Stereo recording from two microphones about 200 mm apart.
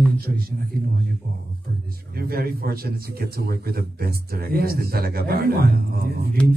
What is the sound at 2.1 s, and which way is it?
A man's voice, 50° right (ahead or behind).